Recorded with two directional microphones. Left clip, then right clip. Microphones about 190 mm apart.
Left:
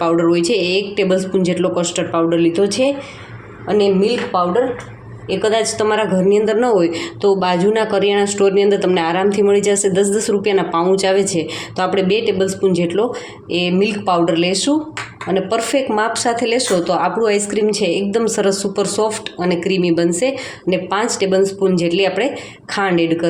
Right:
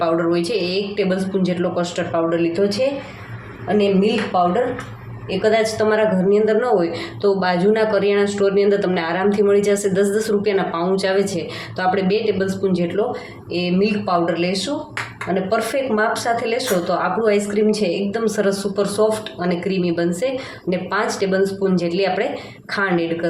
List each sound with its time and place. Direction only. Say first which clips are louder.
0.0 s a woman's voice: left 4 dB; 35° left (ahead or behind)